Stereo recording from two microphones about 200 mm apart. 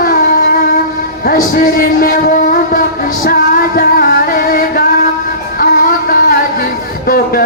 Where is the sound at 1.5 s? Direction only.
45° left (ahead or behind).